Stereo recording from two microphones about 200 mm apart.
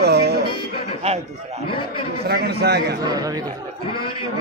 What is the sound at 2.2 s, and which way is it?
Speech, 55° right (ahead or behind).